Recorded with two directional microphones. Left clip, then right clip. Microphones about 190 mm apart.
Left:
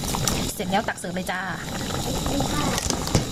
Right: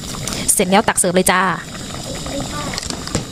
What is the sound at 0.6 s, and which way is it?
A woman's voice, 40° right (ahead or behind).